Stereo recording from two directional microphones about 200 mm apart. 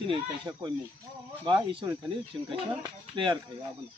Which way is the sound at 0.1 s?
20° right (ahead or behind).